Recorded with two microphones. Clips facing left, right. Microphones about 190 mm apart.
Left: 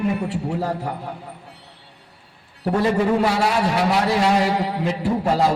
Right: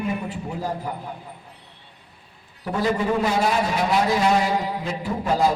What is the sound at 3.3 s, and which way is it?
A man's voice, 70° left (ahead or behind).